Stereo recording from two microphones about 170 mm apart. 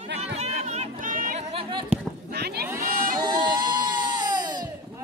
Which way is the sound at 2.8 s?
50° right (ahead or behind).